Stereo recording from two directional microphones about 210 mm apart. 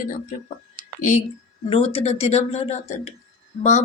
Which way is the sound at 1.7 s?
25° left (ahead or behind).